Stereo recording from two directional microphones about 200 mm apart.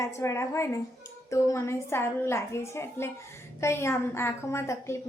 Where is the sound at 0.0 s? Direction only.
15° left (ahead or behind).